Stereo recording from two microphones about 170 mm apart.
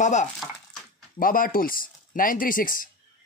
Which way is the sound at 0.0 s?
45° left (ahead or behind).